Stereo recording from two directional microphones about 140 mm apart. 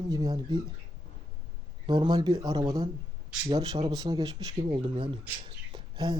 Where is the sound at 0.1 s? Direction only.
25° right (ahead or behind).